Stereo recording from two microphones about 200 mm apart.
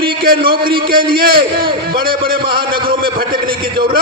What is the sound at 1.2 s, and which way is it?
Speech, 50° right (ahead or behind).